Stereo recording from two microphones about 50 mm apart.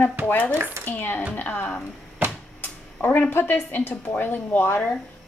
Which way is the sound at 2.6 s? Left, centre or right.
Left.